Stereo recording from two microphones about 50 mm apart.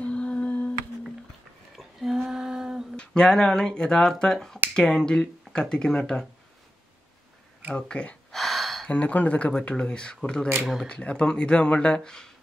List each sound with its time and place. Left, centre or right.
0.0 s humming: left
1.8 s a sound: centre
3.0 s speech: centre
7.7 s speech: centre
8.3 s a sound: centre
8.8 s speech: left
10.6 s speech: centre
10.9 s speech: left